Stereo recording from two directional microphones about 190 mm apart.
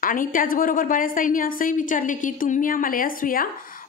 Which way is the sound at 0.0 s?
45° left (ahead or behind).